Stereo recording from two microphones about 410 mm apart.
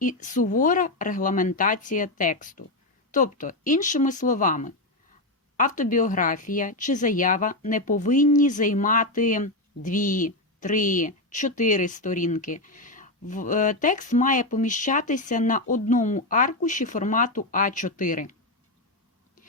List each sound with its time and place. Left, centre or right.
0.0 s a woman's voice: centre